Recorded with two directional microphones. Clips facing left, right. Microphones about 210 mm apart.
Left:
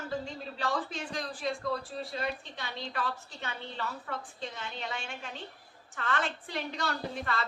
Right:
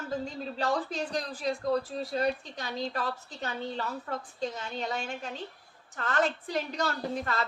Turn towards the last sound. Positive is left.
turn(degrees=-40)  # may be behind; listen again after turning